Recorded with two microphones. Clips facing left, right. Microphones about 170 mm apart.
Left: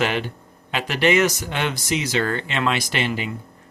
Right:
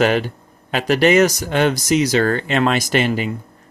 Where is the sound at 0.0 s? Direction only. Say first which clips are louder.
Right 6 dB; 40° right (ahead or behind).